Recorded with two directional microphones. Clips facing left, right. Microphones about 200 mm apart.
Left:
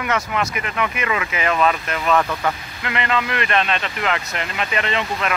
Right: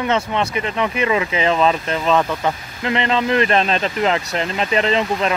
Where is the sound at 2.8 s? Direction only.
30° right (ahead or behind).